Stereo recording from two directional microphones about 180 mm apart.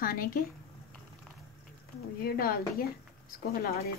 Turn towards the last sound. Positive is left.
turn(degrees=55)  # may be behind; listen again after turning